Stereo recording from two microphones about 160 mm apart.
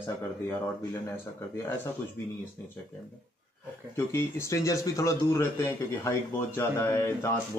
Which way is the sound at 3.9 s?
15° left (ahead or behind).